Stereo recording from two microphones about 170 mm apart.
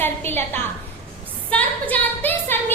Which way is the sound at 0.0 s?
10° left (ahead or behind).